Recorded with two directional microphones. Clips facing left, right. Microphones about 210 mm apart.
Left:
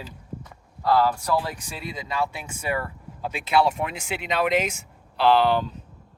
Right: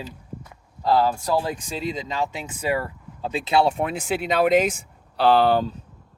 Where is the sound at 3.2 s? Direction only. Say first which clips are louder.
Right 2 dB; 30° right (ahead or behind).